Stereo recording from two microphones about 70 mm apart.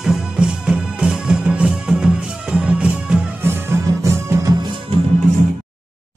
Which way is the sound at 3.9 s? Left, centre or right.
Right.